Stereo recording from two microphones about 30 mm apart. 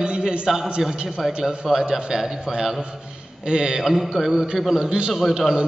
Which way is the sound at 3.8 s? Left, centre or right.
Centre.